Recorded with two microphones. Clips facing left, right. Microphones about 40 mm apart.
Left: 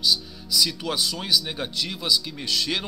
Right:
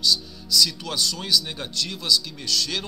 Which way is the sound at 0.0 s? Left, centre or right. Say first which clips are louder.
Even; centre.